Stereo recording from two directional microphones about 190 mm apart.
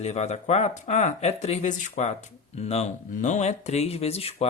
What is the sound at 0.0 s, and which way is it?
Speech, 35° left (ahead or behind).